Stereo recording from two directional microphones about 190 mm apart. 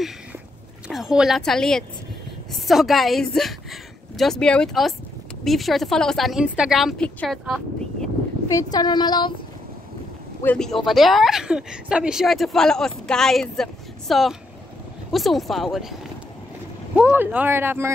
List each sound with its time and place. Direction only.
0.8 s speech: 5° right (ahead or behind)
8.5 s a woman's voice: 20° left (ahead or behind)
10.4 s speech: 5° left (ahead or behind)
16.9 s speech: 10° right (ahead or behind)